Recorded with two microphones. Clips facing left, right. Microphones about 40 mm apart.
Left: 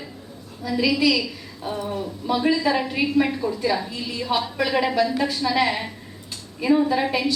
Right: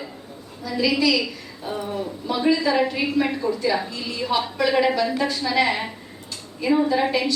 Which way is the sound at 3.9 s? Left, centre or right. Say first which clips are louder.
Even; centre.